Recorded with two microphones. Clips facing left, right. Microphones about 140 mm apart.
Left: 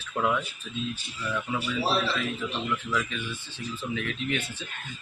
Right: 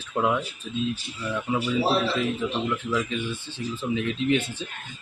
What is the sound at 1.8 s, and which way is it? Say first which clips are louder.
Speech: right 2 dB; 25° right (ahead or behind).